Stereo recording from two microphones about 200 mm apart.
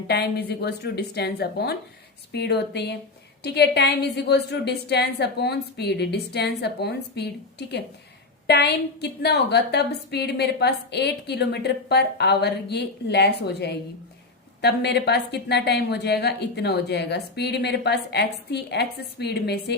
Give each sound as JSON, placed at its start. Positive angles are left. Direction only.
{"t": 0.1, "sound": "a woman's voice", "side_deg": 55}
{"t": 8.4, "sound": "a woman's voice", "side_deg": 55}